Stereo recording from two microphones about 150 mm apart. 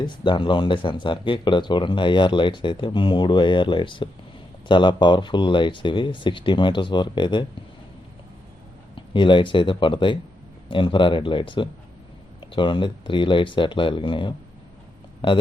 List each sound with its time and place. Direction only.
0.0 s speech: 30° left (ahead or behind)
9.0 s speech: 35° left (ahead or behind)